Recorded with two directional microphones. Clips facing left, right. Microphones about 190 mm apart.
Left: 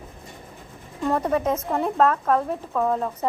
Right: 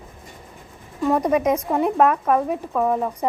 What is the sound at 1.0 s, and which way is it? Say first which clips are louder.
A woman's voice: right 4 dB; 10° right (ahead or behind).